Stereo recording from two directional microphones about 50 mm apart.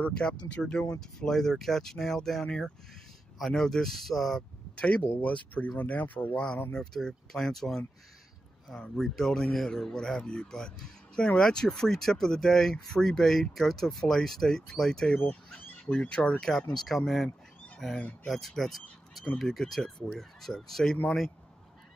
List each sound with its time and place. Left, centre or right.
0.0 s speech: left; by 4.5 s centre
4.7 s speech: left
6.3 s speech: centre
16.3 s speech: centre